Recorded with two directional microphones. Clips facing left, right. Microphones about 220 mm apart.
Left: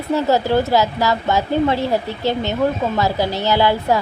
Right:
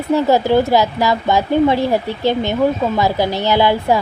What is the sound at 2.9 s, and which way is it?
Speech, 15° right (ahead or behind).